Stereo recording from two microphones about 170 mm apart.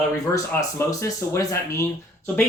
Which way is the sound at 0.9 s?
20° left (ahead or behind).